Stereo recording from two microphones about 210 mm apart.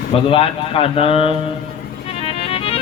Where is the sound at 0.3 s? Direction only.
25° left (ahead or behind).